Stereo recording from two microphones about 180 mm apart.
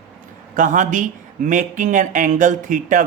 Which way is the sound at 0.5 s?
45° right (ahead or behind).